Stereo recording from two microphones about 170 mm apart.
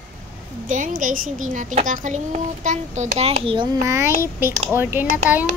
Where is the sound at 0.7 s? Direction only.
50° right (ahead or behind).